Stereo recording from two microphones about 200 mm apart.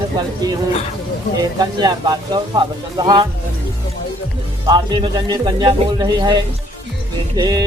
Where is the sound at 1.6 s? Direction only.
20° right (ahead or behind).